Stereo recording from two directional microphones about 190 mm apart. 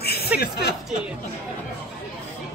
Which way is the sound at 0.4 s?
55° left (ahead or behind).